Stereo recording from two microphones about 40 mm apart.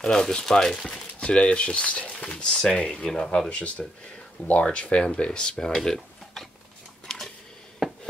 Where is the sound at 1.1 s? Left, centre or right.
Left.